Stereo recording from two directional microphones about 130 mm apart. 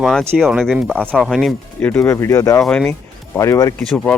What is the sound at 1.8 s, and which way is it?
Speech, 15° left (ahead or behind).